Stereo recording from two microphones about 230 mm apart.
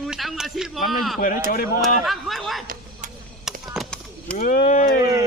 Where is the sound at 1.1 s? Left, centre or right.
Left.